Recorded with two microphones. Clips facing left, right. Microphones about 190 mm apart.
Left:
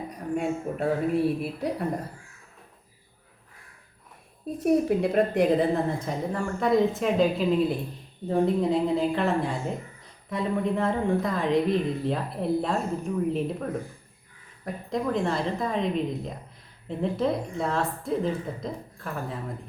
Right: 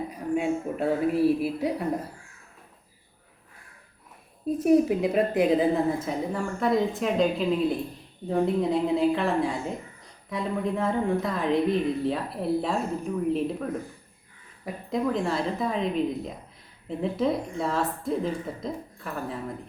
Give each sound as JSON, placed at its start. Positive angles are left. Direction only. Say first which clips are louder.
{"t": 0.1, "sound": "a woman's voice", "louder": "right 1 dB", "side_deg": 0}
{"t": 4.6, "sound": "a woman's voice", "louder": "right 1 dB", "side_deg": 0}